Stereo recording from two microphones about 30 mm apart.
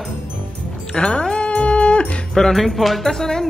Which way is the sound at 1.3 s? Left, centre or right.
Left.